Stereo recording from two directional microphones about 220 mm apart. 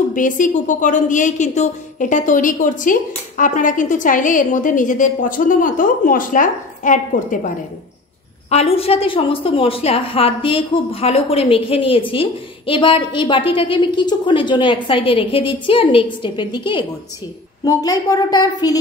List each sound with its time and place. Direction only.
0.1 s a woman's voice: 35° left (ahead or behind); by 18.5 s 15° left (ahead or behind)